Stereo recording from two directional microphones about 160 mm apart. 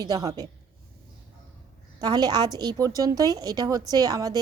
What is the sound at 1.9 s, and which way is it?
A woman's voice, 25° right (ahead or behind).